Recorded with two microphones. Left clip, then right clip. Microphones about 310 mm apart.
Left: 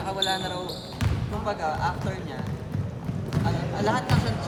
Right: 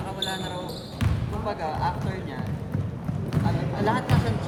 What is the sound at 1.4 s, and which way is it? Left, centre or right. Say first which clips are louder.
Basketball bounce: left 1 dB; left.